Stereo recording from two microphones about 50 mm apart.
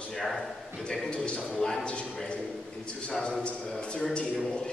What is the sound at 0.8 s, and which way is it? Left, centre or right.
A man's voice, centre.